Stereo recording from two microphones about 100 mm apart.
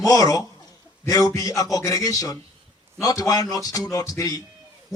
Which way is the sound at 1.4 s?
35° left (ahead or behind).